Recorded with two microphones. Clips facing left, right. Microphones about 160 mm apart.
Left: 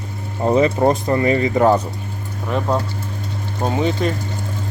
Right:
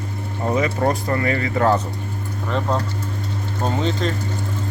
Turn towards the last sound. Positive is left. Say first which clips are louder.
# left 3 dB
turn(degrees=10)  # may be behind; listen again after turning